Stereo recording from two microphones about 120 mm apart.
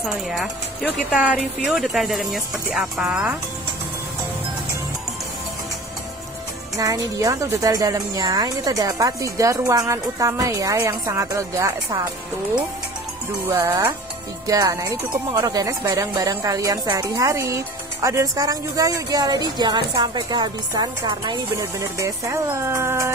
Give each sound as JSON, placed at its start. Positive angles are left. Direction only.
{"t": 0.0, "sound": "speech", "side_deg": 0}
{"t": 6.8, "sound": "a woman's voice", "side_deg": -30}
{"t": 13.5, "sound": "a woman's voice", "side_deg": -30}